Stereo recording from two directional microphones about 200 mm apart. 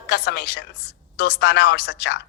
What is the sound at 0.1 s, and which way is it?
A woman's voice, 50° left (ahead or behind).